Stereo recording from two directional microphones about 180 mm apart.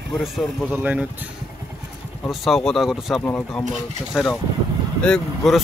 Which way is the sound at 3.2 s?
10° left (ahead or behind).